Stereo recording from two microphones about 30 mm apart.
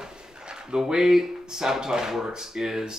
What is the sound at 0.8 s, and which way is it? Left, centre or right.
Speech, right.